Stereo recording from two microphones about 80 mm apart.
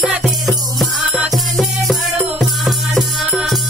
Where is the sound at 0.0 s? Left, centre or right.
Centre.